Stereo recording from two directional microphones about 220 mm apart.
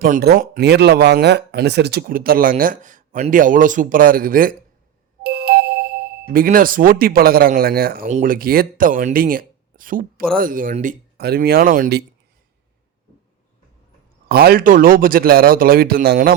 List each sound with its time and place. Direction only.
0.0 s speech: 45° right (ahead or behind)
14.3 s speech: 45° right (ahead or behind)